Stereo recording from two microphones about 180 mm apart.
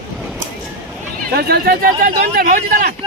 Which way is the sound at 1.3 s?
60° right (ahead or behind).